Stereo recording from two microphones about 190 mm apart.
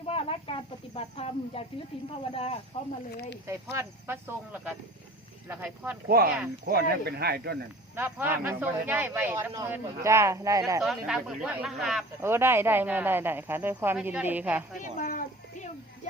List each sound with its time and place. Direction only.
0.0 s speech: 30° left (ahead or behind)
3.1 s speech: 55° left (ahead or behind)
3.4 s speech: 15° right (ahead or behind)
6.1 s speech: 50° right (ahead or behind)
7.9 s speech: 10° right (ahead or behind)
10.8 s speech: centre (ahead or behind)
12.2 s speech: 10° right (ahead or behind)
14.8 s a sound: 45° left (ahead or behind)